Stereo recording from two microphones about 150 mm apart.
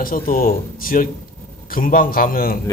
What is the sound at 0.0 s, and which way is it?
Speech, 70° left (ahead or behind).